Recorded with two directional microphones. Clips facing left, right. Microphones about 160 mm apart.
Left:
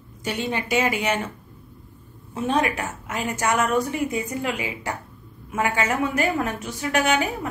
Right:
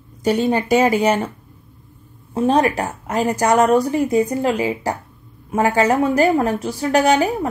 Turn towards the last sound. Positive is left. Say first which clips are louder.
# right 7 dB
turn(degrees=-35)  # may be behind; listen again after turning